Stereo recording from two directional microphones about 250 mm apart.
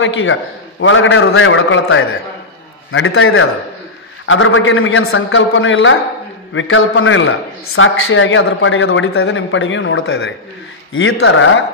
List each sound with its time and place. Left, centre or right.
0.0 s a man's voice: left